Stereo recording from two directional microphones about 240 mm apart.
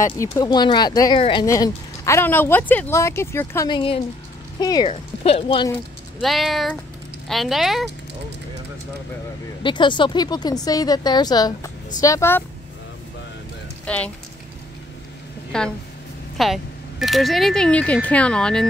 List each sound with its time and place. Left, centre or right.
0.2 s speech: centre
6.1 s speech: centre
9.6 s speech: centre
13.8 s speech: centre
15.5 s speech: centre